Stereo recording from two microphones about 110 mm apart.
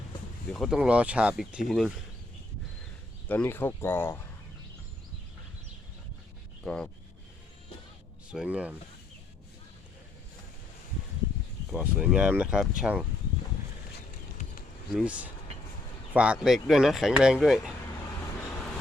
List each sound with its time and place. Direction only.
0.5 s speech: centre (ahead or behind)
0.8 s speech: 10° right (ahead or behind)
3.2 s speech: 15° left (ahead or behind)
6.7 s speech: 5° left (ahead or behind)
8.3 s speech: 10° right (ahead or behind)
11.8 s speech: 15° right (ahead or behind)
16.1 s speech: 10° right (ahead or behind)